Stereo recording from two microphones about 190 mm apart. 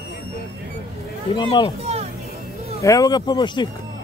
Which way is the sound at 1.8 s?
35° right (ahead or behind).